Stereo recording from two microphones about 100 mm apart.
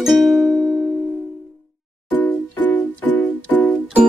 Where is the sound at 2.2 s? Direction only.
20° left (ahead or behind).